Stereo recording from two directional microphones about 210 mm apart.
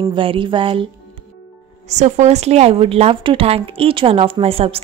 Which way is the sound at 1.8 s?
35° right (ahead or behind).